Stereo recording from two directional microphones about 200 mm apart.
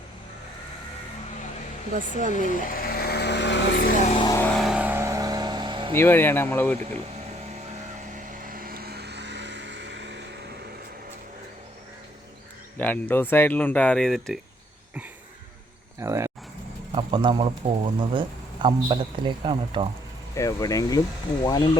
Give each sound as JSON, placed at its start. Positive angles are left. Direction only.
{"t": 2.3, "sound": "vehicle", "side_deg": 40}
{"t": 4.2, "sound": "vehicle", "side_deg": 15}
{"t": 4.5, "sound": "vehicle", "side_deg": 0}
{"t": 5.9, "sound": "speech", "side_deg": 10}
{"t": 8.0, "sound": "vehicle", "side_deg": -40}
{"t": 12.7, "sound": "speech", "side_deg": 10}
{"t": 16.0, "sound": "a sound", "side_deg": -15}
{"t": 16.9, "sound": "speech", "side_deg": -25}
{"t": 20.3, "sound": "speech", "side_deg": 15}